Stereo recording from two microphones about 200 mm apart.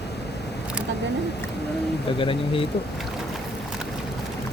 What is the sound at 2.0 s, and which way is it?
Speech, 25° left (ahead or behind).